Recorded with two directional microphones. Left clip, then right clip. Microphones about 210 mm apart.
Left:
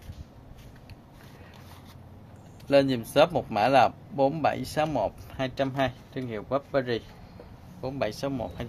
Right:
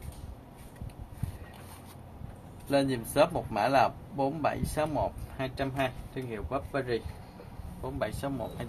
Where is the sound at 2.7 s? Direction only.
55° left (ahead or behind).